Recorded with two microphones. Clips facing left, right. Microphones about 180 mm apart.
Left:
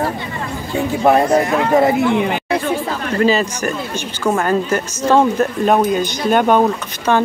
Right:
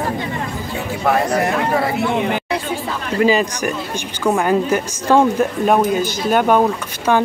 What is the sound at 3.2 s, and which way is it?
A woman's voice, 15° right (ahead or behind).